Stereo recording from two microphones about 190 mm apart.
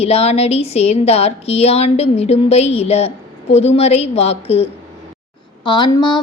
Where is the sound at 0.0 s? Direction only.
30° left (ahead or behind).